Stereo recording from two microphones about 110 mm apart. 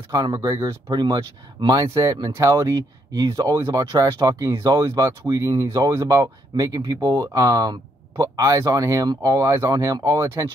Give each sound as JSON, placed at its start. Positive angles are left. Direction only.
{"t": 0.1, "sound": "speech", "side_deg": -30}
{"t": 0.9, "sound": "speech", "side_deg": -40}